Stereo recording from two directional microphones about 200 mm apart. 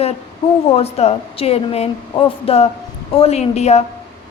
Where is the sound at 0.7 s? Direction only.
30° left (ahead or behind).